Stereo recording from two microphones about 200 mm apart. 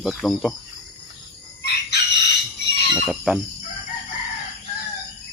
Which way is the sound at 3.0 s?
Centre (ahead or behind).